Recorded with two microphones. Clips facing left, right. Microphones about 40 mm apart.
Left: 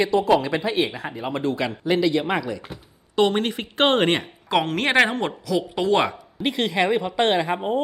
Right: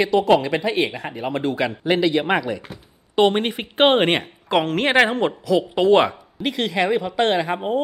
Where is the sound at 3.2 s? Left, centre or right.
Centre.